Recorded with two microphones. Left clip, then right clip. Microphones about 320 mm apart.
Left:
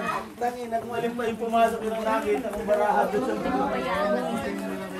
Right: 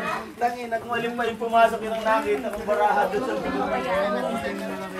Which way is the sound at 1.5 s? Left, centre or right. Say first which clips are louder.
Right 4 dB; right.